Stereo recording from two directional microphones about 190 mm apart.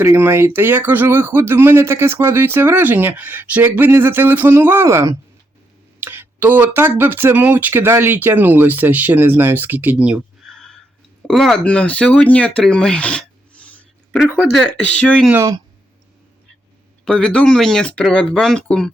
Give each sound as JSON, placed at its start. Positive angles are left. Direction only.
{"t": 0.0, "sound": "speech", "side_deg": -15}
{"t": 15.3, "sound": "speech", "side_deg": -15}
{"t": 17.1, "sound": "speech", "side_deg": 5}